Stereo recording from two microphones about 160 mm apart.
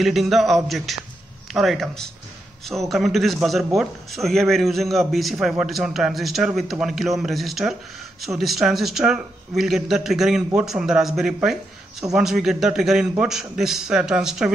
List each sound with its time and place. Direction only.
0.0 s a man's voice: centre (ahead or behind)